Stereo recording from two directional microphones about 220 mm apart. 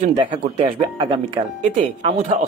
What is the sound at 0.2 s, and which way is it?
Speech, 25° right (ahead or behind).